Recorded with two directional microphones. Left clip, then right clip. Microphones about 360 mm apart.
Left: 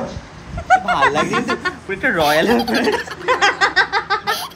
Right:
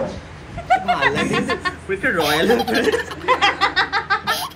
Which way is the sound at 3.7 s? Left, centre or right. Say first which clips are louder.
Left 2 dB; left.